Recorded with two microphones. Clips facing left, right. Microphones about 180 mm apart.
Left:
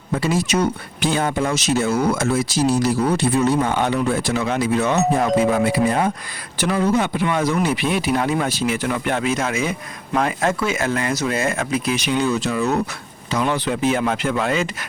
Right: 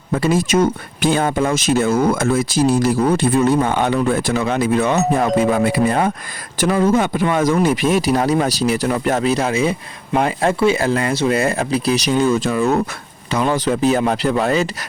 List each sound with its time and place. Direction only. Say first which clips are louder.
0.2 s speech: right 4 dB; 50° right (ahead or behind)